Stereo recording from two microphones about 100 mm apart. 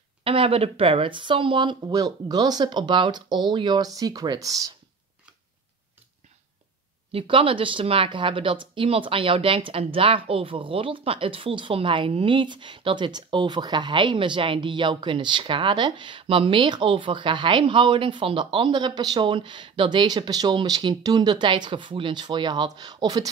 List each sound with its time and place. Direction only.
0.2 s speech: 65° right (ahead or behind); by 4.7 s 35° right (ahead or behind)
7.1 s a woman's voice: 65° right (ahead or behind); by 23.3 s 40° right (ahead or behind)